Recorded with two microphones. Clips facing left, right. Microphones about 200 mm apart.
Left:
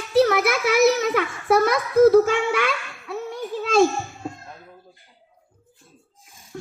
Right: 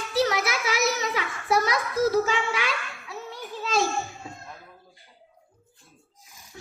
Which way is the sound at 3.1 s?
55° left (ahead or behind).